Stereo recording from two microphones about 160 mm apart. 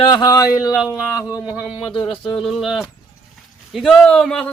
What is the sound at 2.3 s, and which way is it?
Speech, centre (ahead or behind).